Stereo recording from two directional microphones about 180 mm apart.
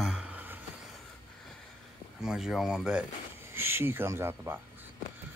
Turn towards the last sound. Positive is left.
turn(degrees=-15)  # may be behind; listen again after turning